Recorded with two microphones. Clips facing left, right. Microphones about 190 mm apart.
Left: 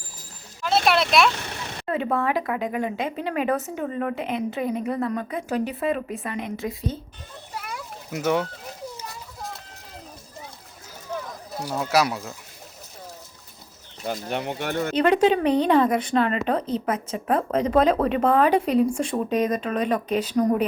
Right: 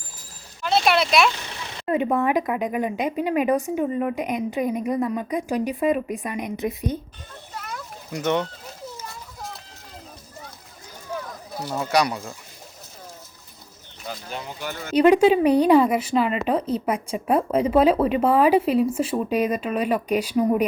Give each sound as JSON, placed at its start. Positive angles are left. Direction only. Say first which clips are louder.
{"t": 0.6, "sound": "speech", "louder": "right 1 dB", "side_deg": 0}
{"t": 1.9, "sound": "speech", "louder": "right 3 dB", "side_deg": -15}
{"t": 7.5, "sound": "a sound", "louder": "even", "side_deg": 10}
{"t": 9.0, "sound": "children playing", "louder": "even", "side_deg": 0}
{"t": 11.1, "sound": "a sound", "louder": "even", "side_deg": 0}
{"t": 11.7, "sound": "speech", "louder": "even", "side_deg": 5}
{"t": 14.3, "sound": "speech", "louder": "left 4 dB", "side_deg": 65}
{"t": 14.9, "sound": "speech", "louder": "right 4 dB", "side_deg": -10}